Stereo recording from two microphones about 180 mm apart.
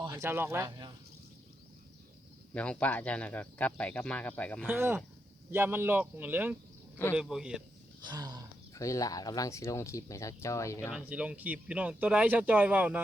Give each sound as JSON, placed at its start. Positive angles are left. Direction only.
{"t": 0.1, "sound": "speech", "side_deg": -15}
{"t": 2.5, "sound": "speech", "side_deg": 5}
{"t": 4.6, "sound": "a man's voice", "side_deg": -10}
{"t": 8.0, "sound": "speech", "side_deg": -20}
{"t": 8.7, "sound": "speech", "side_deg": 20}
{"t": 10.9, "sound": "speech", "side_deg": -5}